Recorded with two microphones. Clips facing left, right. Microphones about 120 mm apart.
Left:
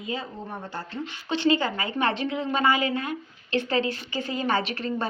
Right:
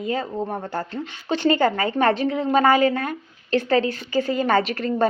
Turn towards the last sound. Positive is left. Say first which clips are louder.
# right 7 dB
turn(degrees=-45)  # may be behind; listen again after turning